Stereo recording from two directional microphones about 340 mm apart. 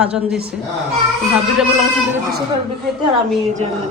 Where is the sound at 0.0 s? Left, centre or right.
Centre.